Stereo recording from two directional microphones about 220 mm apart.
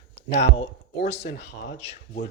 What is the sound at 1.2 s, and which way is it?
Speech, 55° left (ahead or behind).